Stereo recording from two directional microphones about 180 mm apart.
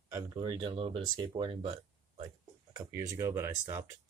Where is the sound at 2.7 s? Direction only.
20° right (ahead or behind).